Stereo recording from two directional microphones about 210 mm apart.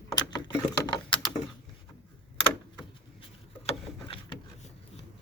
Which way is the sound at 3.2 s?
25° left (ahead or behind).